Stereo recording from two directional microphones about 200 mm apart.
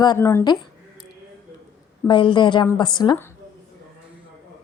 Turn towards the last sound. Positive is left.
turn(degrees=15)  # may be behind; listen again after turning